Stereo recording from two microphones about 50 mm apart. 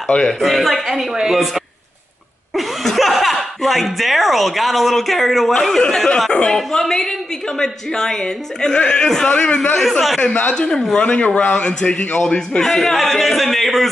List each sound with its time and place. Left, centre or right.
0.1 s a man's voice: centre
0.4 s a man's voice: centre; by 10.7 s left
10.7 s a man's voice: centre
11.0 s speech: left
12.2 s a man's voice: centre